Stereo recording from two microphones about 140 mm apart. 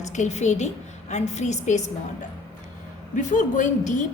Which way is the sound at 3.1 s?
65° left (ahead or behind).